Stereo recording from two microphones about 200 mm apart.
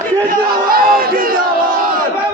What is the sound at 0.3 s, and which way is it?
Crowd, 45° right (ahead or behind).